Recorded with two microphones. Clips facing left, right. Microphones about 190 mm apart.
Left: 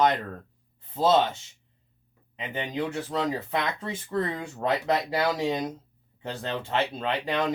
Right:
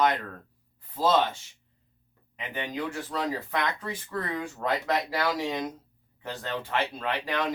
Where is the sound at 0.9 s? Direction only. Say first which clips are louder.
Left 2 dB; 25° left (ahead or behind).